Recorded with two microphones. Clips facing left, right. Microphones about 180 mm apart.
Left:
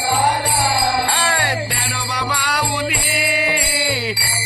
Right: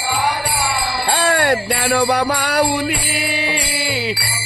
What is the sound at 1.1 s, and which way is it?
Music, 40° right (ahead or behind).